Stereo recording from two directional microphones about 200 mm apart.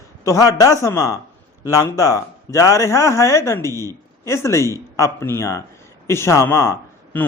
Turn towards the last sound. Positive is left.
turn(degrees=10)  # may be behind; listen again after turning